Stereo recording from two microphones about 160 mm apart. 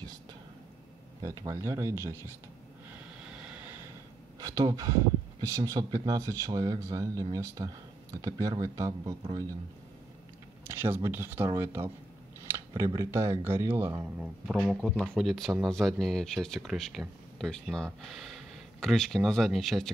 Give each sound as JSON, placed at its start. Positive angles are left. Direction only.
{"t": 1.2, "sound": "speech", "side_deg": -20}
{"t": 2.9, "sound": "vehicle", "side_deg": -10}
{"t": 4.4, "sound": "speech", "side_deg": -25}
{"t": 10.6, "sound": "speech", "side_deg": -15}
{"t": 14.8, "sound": "speech", "side_deg": 5}